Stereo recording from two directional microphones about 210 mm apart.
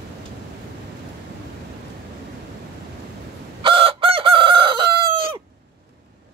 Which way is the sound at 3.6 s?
25° right (ahead or behind).